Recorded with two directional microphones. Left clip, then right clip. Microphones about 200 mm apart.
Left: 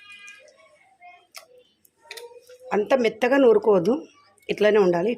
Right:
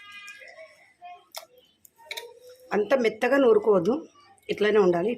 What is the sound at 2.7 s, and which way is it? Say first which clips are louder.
Speech: left 2 dB; 25° left (ahead or behind).